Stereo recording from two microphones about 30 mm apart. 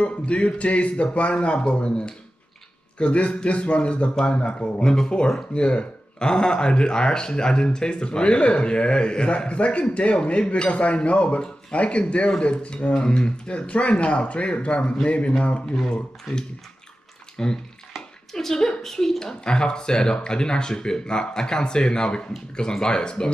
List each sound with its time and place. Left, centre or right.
0.0 s speech: left
4.8 s speech: left
12.3 s speech: left
13.5 s speech: left
15.6 s a woman's voice: centre
17.4 s a woman's voice: left
19.4 s speech: left